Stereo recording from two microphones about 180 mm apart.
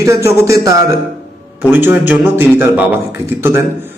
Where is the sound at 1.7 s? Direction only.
10° right (ahead or behind).